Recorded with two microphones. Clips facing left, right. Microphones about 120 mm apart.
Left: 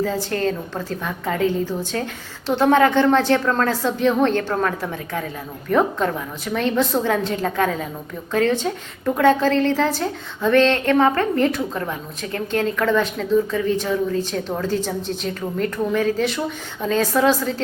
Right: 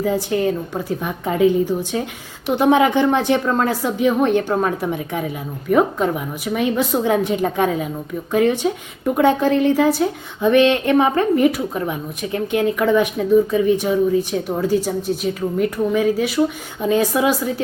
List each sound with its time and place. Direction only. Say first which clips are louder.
0.0 s a woman's voice: right 3 dB; 15° right (ahead or behind)